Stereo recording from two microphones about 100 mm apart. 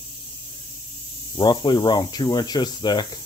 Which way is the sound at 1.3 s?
50° left (ahead or behind).